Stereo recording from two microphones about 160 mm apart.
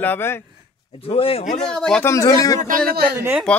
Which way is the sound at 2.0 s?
20° left (ahead or behind).